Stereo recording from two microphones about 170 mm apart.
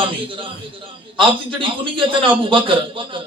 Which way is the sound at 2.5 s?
30° right (ahead or behind).